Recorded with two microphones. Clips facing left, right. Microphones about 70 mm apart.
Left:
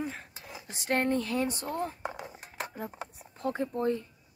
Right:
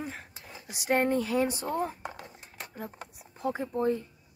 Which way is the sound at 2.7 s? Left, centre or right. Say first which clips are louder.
Left 2 dB; centre.